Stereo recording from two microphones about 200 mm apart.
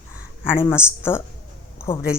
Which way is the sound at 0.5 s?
15° left (ahead or behind).